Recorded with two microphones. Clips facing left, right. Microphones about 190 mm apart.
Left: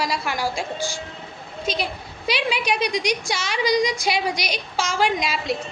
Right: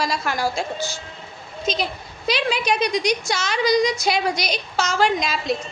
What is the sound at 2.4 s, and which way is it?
A woman's voice, 10° left (ahead or behind).